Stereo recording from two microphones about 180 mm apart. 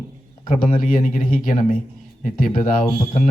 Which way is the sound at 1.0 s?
50° left (ahead or behind).